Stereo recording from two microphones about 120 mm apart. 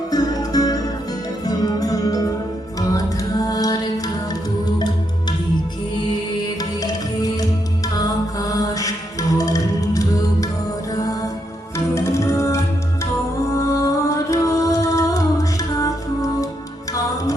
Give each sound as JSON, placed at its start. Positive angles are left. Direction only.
{"t": 0.1, "sound": "music", "side_deg": 30}
{"t": 2.9, "sound": "a capella", "side_deg": 30}
{"t": 7.9, "sound": "mantra", "side_deg": 30}
{"t": 9.4, "sound": "music", "side_deg": 30}
{"t": 11.9, "sound": "music", "side_deg": 25}